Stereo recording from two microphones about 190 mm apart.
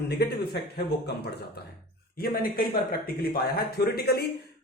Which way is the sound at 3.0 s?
50° left (ahead or behind).